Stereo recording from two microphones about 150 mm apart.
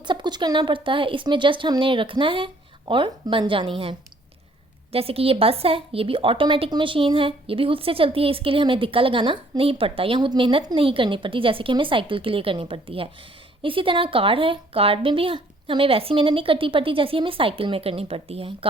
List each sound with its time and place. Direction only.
0.1 s a woman's voice: 30° right (ahead or behind)